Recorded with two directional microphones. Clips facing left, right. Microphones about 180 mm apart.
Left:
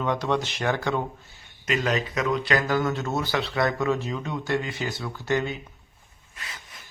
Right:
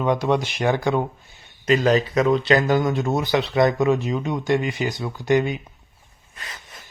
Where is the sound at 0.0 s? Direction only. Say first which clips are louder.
Right 5 dB; 15° right (ahead or behind).